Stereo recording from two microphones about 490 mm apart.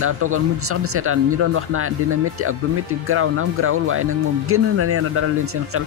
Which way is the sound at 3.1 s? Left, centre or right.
Right.